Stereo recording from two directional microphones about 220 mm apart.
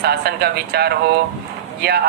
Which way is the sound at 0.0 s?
45° right (ahead or behind).